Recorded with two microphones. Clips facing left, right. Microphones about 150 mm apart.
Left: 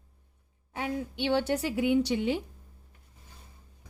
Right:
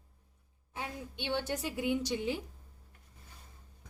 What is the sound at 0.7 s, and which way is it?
A woman's voice, 70° left (ahead or behind).